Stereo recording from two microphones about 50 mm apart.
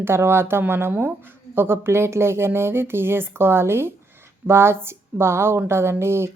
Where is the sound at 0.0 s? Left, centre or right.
Right.